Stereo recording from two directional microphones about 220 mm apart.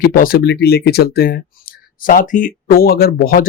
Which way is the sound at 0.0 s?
40° left (ahead or behind).